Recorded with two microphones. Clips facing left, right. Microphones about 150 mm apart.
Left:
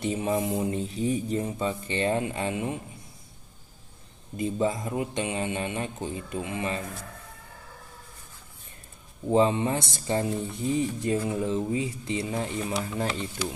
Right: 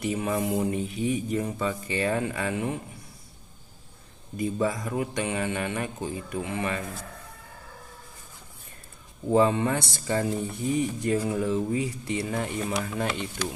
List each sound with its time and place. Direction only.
0.0 s speech: 25° left (ahead or behind)
4.4 s speech: 25° left (ahead or behind)
9.3 s speech: 20° left (ahead or behind)